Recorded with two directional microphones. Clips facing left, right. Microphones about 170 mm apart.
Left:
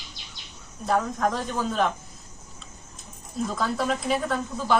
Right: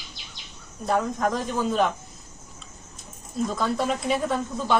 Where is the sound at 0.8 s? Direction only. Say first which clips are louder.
Even; centre (ahead or behind).